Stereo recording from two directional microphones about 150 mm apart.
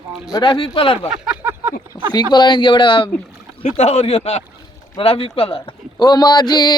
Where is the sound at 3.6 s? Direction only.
45° left (ahead or behind); by 6.7 s 25° left (ahead or behind).